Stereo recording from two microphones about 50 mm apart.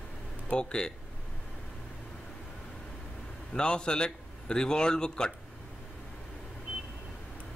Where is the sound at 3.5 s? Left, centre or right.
Centre.